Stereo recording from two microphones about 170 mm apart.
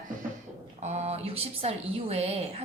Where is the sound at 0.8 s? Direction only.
40° right (ahead or behind).